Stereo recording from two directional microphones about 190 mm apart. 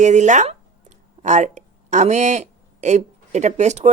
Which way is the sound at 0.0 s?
40° right (ahead or behind).